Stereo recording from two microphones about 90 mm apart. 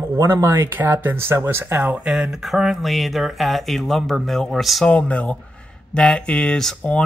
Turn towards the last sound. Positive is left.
turn(degrees=10)  # may be behind; listen again after turning